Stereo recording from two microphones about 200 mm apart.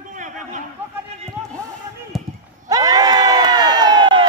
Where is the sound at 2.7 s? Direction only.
15° right (ahead or behind).